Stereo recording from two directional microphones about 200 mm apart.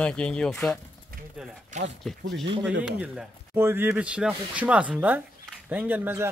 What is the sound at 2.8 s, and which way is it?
Speech, 5° right (ahead or behind).